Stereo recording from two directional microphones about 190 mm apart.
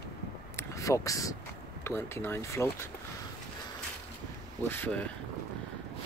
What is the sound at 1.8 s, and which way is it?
Speech, 10° left (ahead or behind).